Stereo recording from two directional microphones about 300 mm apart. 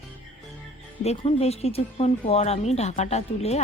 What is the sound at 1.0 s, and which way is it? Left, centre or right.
A woman's voice, left.